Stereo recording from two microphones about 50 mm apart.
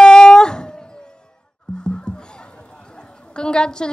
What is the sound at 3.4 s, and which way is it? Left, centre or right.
Speech, centre.